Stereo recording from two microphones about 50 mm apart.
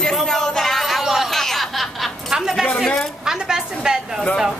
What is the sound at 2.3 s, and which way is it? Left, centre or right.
A woman's voice, centre.